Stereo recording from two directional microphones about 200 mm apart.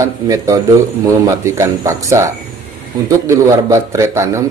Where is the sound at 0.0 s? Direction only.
15° right (ahead or behind).